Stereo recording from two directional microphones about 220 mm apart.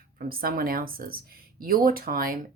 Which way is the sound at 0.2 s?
40° right (ahead or behind).